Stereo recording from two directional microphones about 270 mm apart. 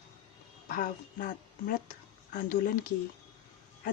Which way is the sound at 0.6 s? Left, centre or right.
Left.